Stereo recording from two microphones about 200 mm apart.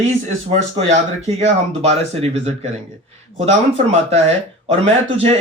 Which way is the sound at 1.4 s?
30° right (ahead or behind).